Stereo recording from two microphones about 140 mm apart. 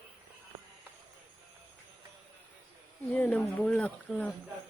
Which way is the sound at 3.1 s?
10° left (ahead or behind).